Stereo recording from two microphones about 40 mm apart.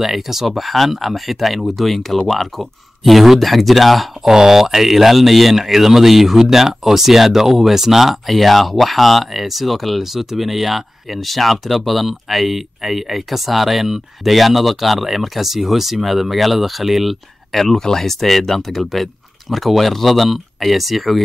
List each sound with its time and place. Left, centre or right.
0.0 s speech: centre
4.3 s speech: centre